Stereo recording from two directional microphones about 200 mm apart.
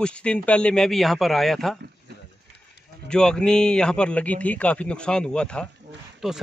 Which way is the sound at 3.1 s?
5° left (ahead or behind).